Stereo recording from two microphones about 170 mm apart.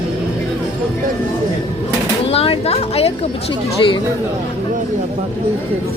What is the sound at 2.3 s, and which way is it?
Speech, 35° left (ahead or behind).